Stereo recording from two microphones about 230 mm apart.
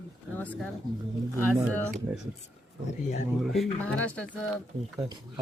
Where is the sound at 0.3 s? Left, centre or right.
Centre.